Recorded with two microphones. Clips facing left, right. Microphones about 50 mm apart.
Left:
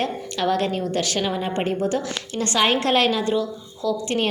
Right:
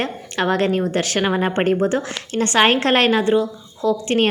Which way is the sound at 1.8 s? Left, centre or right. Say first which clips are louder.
Right 3 dB; right.